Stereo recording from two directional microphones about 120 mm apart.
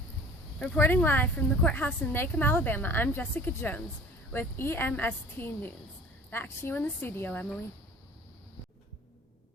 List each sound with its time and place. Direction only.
0.8 s a woman's voice: 15° left (ahead or behind)